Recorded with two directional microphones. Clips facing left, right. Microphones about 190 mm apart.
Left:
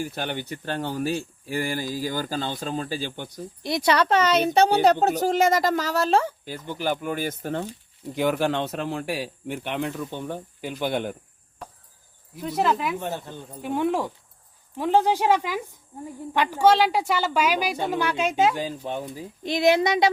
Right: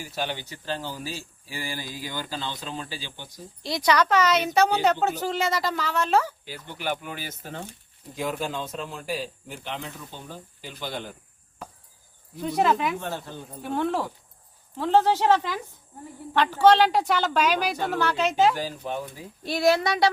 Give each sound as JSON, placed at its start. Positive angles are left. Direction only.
{"t": 0.0, "sound": "speech", "side_deg": 55}
{"t": 3.6, "sound": "a woman's voice", "side_deg": 25}
{"t": 6.4, "sound": "speech", "side_deg": 45}
{"t": 8.1, "sound": "speech", "side_deg": 70}
{"t": 12.4, "sound": "speech", "side_deg": 0}
{"t": 13.0, "sound": "a woman's voice", "side_deg": 15}
{"t": 18.5, "sound": "a woman's voice", "side_deg": 25}